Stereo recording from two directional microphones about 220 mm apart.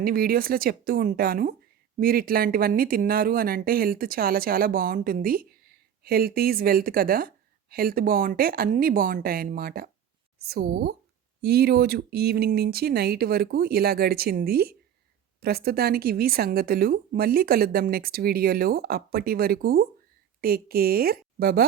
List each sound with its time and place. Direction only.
0.0 s a woman's voice: 40° right (ahead or behind)